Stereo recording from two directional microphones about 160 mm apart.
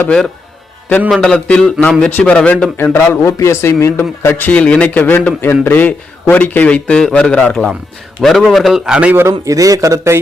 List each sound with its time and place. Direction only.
0.0 s a man's voice: 5° left (ahead or behind); by 10.2 s 20° right (ahead or behind)